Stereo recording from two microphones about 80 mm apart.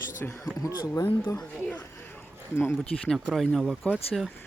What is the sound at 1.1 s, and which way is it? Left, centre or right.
Speech, left.